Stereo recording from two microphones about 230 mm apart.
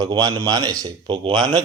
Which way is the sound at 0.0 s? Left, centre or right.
Centre.